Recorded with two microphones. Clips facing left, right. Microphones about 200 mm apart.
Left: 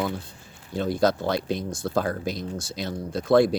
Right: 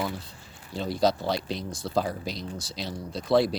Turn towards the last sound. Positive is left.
turn(degrees=50)  # may be behind; listen again after turning